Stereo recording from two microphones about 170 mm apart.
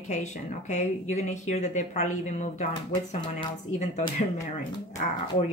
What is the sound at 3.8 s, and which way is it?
Speech, 45° left (ahead or behind).